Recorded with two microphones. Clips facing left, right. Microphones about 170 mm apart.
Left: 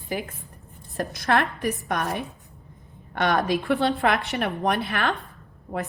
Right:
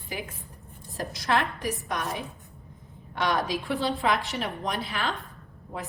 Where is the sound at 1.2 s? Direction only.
60° left (ahead or behind).